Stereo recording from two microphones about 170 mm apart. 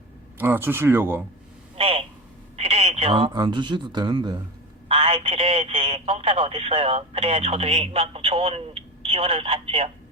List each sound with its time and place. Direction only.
0.3 s speech: 10° right (ahead or behind)
1.7 s a sound: 35° right (ahead or behind)
2.6 s speech: 35° right (ahead or behind)